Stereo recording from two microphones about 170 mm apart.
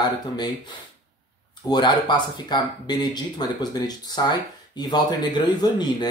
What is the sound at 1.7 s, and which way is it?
Speech, 25° left (ahead or behind).